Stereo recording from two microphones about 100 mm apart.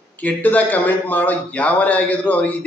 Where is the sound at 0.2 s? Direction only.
15° left (ahead or behind).